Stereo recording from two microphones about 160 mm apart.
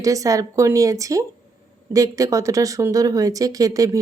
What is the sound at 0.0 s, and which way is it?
Speech, 20° right (ahead or behind).